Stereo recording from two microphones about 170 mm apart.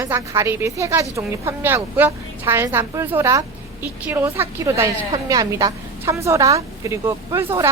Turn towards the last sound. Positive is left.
turn(degrees=-15)  # may be behind; listen again after turning